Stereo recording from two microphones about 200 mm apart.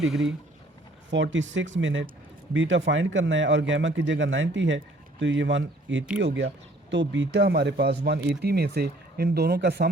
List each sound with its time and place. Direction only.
1.1 s speech: 65° right (ahead or behind)